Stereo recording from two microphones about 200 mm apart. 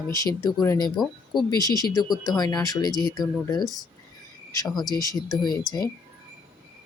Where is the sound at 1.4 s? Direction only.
20° left (ahead or behind).